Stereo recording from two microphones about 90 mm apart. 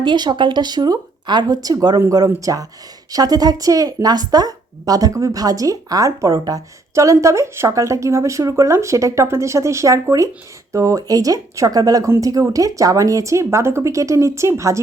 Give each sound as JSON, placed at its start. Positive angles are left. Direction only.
{"t": 0.0, "sound": "a woman's voice", "side_deg": -55}